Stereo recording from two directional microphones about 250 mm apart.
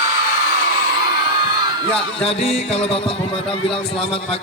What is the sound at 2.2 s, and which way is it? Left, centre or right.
A man's voice, left.